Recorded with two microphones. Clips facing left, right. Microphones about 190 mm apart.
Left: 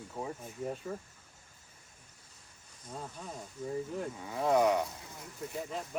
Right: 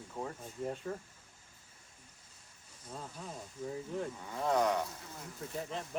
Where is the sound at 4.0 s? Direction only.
10° left (ahead or behind).